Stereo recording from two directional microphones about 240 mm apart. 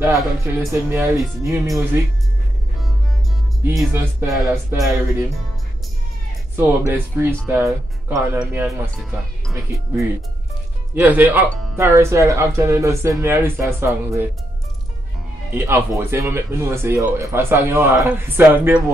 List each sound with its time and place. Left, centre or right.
0.0 s speech: centre
3.6 s speech: centre
6.9 s speech: centre
11.0 s speech: centre
15.5 s speech: centre